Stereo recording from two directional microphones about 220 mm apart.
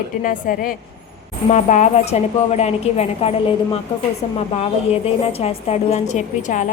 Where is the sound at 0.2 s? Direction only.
40° left (ahead or behind).